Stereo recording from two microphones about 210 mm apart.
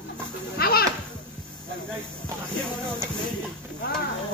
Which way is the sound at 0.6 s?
45° left (ahead or behind).